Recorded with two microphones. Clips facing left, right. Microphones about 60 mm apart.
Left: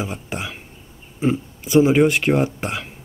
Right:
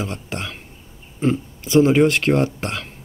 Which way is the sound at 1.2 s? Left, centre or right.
Centre.